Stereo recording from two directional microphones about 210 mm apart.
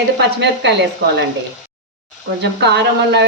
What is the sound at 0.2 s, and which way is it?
Speech, 55° right (ahead or behind).